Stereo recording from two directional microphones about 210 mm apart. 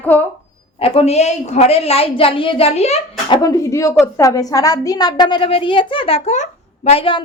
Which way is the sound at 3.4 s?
15° left (ahead or behind).